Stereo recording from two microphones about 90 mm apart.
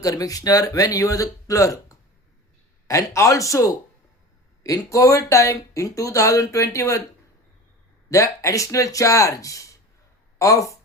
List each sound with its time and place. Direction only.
0.0 s speech: 40° left (ahead or behind)
8.1 s speech: 35° left (ahead or behind)